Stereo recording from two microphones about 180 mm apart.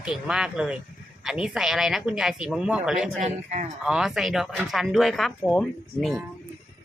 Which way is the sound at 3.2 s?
40° right (ahead or behind).